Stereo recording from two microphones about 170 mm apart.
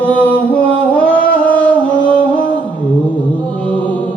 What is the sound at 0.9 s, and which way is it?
Music, 10° left (ahead or behind).